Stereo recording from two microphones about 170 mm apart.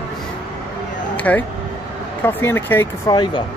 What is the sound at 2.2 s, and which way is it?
Speech, 15° left (ahead or behind).